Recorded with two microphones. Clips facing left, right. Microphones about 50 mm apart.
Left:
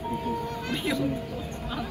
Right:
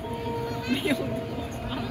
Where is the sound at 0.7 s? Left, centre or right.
Centre.